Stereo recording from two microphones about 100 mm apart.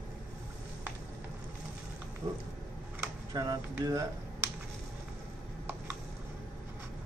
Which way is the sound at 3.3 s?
40° right (ahead or behind).